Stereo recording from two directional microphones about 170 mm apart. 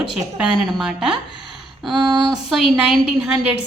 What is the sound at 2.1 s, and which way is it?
Speech, 25° right (ahead or behind).